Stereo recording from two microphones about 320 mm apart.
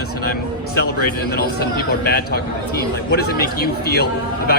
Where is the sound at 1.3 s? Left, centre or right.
Left.